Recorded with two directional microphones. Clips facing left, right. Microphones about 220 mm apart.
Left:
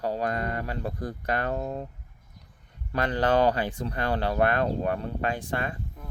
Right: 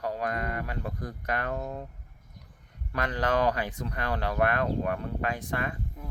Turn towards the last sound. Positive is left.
turn(degrees=30)  # may be behind; listen again after turning